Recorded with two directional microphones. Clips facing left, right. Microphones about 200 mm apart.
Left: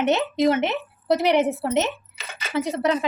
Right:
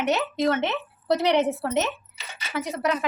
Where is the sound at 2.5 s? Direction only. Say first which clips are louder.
Left 4 dB; 25° left (ahead or behind).